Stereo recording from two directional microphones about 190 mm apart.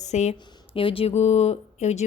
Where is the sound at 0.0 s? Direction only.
35° left (ahead or behind).